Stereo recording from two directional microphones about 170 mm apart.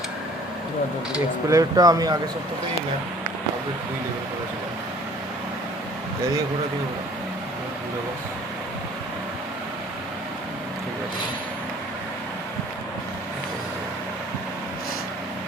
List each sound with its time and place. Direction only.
1.5 s speech: 20° right (ahead or behind)